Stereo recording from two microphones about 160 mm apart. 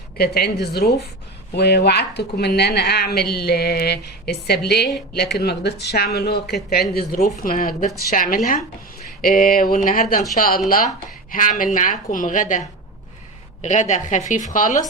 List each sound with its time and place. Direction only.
0.2 s a woman's voice: 85° left
7.4 s a woman's voice: 60° left (ahead or behind)